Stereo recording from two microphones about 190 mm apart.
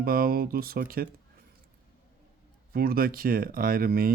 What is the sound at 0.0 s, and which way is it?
Speech, 50° right (ahead or behind).